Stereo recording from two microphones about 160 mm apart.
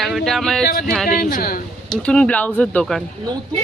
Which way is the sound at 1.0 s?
65° left (ahead or behind).